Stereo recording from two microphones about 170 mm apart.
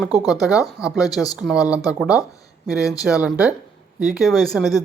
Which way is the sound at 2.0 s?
5° right (ahead or behind).